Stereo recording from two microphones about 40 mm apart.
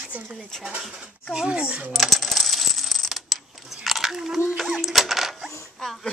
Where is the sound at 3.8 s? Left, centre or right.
Centre.